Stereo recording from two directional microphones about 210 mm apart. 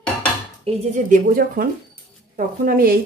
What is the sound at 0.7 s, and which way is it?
Speech, 30° right (ahead or behind).